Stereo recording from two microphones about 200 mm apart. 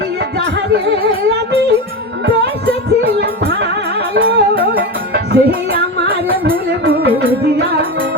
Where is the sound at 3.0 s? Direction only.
55° right (ahead or behind).